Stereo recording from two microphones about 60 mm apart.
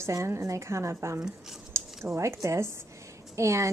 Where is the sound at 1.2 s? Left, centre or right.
Centre.